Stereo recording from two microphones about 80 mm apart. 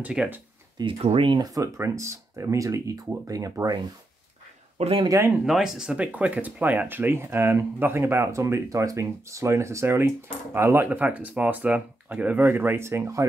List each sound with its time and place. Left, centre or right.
0.0 s speech: centre
0.7 s speech: right
1.4 s speech: right
5.4 s speech: centre; by 10.9 s right
10.9 s speech: centre; by 13.3 s right